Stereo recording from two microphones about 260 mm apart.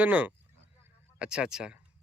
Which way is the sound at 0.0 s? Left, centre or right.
Centre.